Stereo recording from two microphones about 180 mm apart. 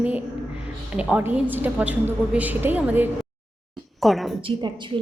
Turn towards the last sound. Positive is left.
turn(degrees=-25)  # may be behind; listen again after turning